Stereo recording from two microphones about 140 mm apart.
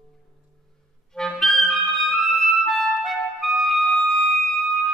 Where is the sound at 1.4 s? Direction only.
Centre (ahead or behind).